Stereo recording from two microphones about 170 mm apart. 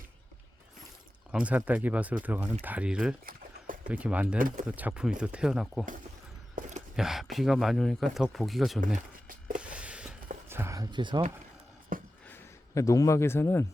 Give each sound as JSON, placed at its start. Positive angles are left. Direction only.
{"t": 1.3, "sound": "speech", "side_deg": -10}
{"t": 4.4, "sound": "speech", "side_deg": -55}
{"t": 4.6, "sound": "speech", "side_deg": -10}
{"t": 6.6, "sound": "a sound", "side_deg": -45}
{"t": 6.9, "sound": "speech", "side_deg": 0}
{"t": 9.6, "sound": "a sound", "side_deg": -5}
{"t": 10.5, "sound": "speech", "side_deg": -15}
{"t": 11.9, "sound": "a sound", "side_deg": -55}
{"t": 12.3, "sound": "speech", "side_deg": 20}